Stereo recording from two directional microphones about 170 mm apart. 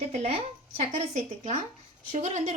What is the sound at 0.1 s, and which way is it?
Speech, 40° right (ahead or behind).